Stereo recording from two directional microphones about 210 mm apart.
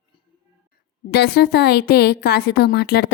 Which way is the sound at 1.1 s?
50° left (ahead or behind).